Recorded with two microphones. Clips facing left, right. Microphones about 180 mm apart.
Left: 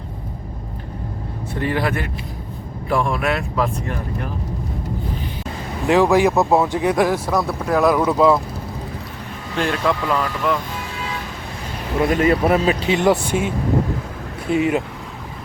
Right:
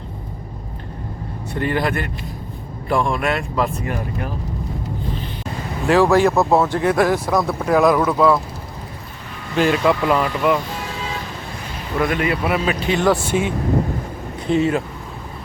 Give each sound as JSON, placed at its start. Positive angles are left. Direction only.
{"t": 1.5, "sound": "speech", "side_deg": 0}
{"t": 5.9, "sound": "speech", "side_deg": 15}
{"t": 7.1, "sound": "speech", "side_deg": 0}
{"t": 8.0, "sound": "speech", "side_deg": 20}
{"t": 9.6, "sound": "speech", "side_deg": -5}
{"t": 11.9, "sound": "speech", "side_deg": 35}
{"t": 12.9, "sound": "speech", "side_deg": 20}
{"t": 14.5, "sound": "speech", "side_deg": 15}